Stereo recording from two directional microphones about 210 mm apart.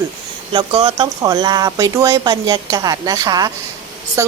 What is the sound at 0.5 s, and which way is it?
A woman's voice, 25° right (ahead or behind).